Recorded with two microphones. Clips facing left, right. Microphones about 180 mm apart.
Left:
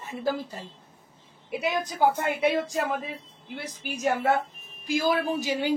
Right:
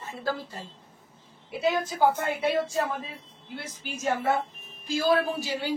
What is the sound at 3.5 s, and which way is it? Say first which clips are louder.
Speech: left 2 dB; 15° left (ahead or behind).